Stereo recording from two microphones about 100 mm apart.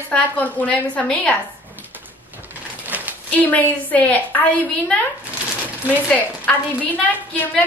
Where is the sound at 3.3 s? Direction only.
15° left (ahead or behind).